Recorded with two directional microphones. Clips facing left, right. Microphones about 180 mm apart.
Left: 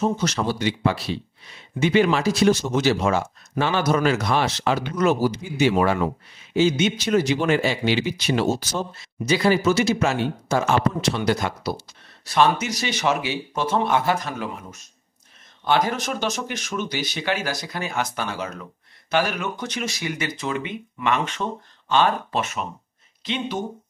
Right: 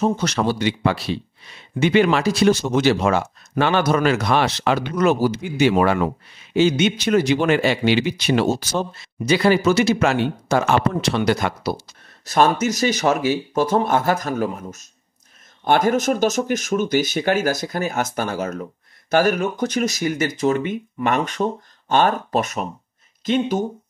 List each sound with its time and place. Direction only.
0.2 s speech: 65° right (ahead or behind)
12.3 s speech: 45° right (ahead or behind)